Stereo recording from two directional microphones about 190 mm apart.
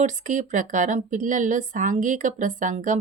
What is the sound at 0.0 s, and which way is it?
Speech, 40° right (ahead or behind).